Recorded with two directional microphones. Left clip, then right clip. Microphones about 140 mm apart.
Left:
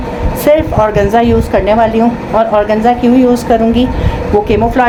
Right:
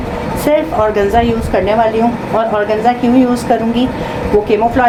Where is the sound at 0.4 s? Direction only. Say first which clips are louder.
Left 3 dB; 90° left.